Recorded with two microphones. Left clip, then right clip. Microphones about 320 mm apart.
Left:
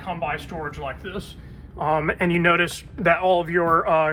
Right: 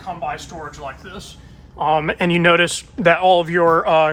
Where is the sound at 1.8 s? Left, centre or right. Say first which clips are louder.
Right 4 dB; right.